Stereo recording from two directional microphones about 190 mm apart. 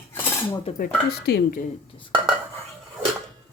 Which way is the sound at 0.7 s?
50° left (ahead or behind).